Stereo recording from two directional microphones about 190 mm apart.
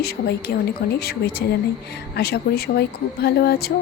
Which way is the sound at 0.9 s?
55° left (ahead or behind).